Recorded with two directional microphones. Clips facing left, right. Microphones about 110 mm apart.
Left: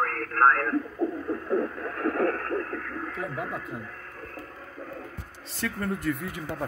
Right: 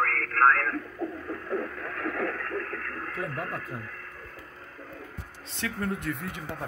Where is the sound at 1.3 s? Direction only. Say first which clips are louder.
Left 5 dB; 20° left (ahead or behind).